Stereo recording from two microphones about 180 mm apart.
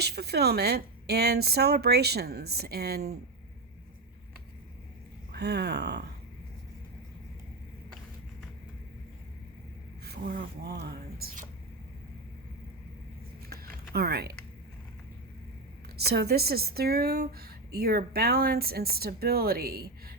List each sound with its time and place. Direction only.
0.0 s a woman's voice: 60° right (ahead or behind)
5.3 s a woman's voice: 65° right (ahead or behind)
10.1 s speech: 55° right (ahead or behind)
10.8 s a sound: 55° right (ahead or behind)
13.5 s typing: 60° right (ahead or behind)
16.0 s a woman's voice: 60° right (ahead or behind)